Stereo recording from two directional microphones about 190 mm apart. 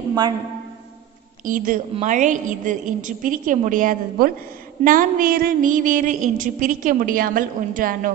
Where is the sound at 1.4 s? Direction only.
45° right (ahead or behind).